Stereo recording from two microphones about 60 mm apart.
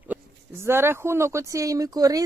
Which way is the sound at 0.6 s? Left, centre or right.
Right.